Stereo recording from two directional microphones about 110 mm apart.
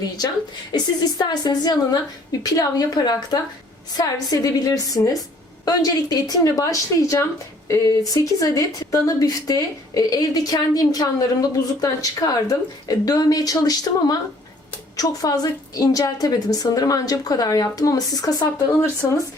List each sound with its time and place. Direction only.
0.7 s speech: 40° left (ahead or behind)